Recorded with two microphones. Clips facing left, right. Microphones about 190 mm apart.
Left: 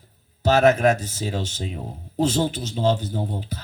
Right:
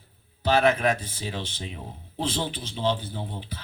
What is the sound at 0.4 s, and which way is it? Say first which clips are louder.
A man's voice: left 5 dB; 45° left (ahead or behind).